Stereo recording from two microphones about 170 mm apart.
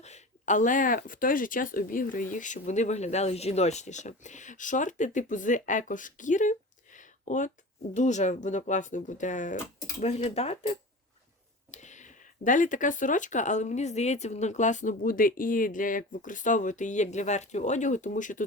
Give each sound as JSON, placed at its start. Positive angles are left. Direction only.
{"t": 0.0, "sound": "speech", "side_deg": 45}